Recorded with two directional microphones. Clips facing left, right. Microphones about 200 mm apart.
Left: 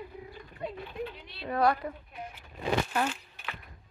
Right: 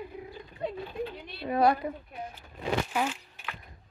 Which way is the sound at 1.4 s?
10° right (ahead or behind).